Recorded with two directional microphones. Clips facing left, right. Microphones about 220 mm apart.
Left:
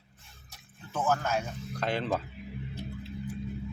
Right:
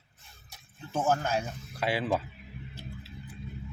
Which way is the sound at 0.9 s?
30° right (ahead or behind).